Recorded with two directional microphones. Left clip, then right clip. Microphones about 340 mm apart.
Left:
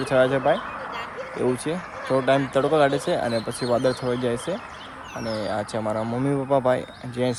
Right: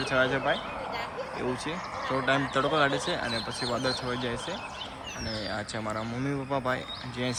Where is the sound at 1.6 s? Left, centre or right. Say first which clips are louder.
Left 4 dB; centre.